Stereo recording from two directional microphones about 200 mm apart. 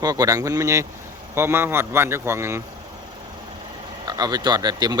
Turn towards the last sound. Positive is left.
turn(degrees=-20)  # may be behind; listen again after turning